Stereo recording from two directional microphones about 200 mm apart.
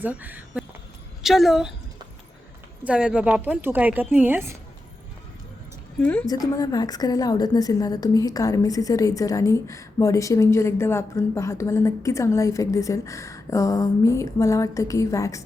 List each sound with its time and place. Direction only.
0.0 s a woman's voice: 10° right (ahead or behind)
2.8 s a woman's voice: 5° right (ahead or behind)
6.0 s a woman's voice: 5° left (ahead or behind)
6.2 s a woman's voice: 20° left (ahead or behind)